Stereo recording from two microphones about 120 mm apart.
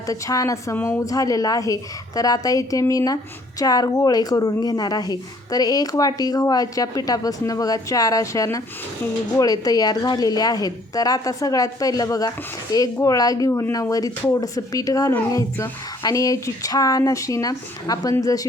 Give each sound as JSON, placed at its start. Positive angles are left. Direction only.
{"t": 0.1, "sound": "a woman's voice", "side_deg": 30}